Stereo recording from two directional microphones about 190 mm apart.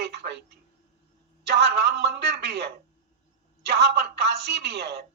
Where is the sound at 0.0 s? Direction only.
60° right (ahead or behind).